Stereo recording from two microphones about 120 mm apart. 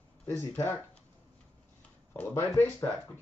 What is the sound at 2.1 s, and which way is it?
Speech, 20° left (ahead or behind).